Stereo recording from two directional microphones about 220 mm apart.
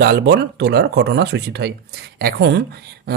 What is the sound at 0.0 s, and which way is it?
Speech, 50° right (ahead or behind).